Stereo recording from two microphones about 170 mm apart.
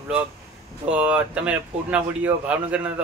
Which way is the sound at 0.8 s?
10° right (ahead or behind).